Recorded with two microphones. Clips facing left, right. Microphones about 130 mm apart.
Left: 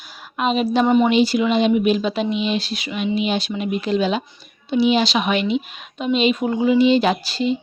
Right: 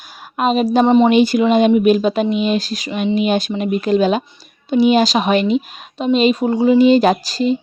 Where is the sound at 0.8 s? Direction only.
30° right (ahead or behind).